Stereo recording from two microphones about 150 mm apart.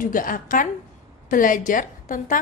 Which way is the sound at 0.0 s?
65° left (ahead or behind).